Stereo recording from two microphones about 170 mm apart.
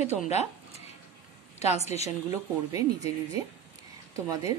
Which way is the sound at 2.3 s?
20° right (ahead or behind).